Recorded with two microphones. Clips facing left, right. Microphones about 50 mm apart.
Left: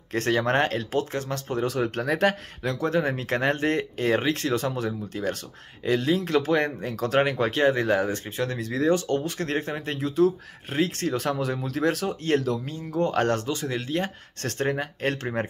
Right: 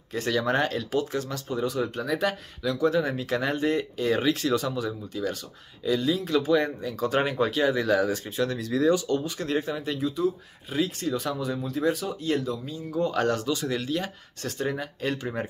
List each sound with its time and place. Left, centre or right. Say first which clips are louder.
0.3 s speech: left 2 dB; left
1.5 s speech: left 2 dB; left
14.4 s speech: left 3 dB; left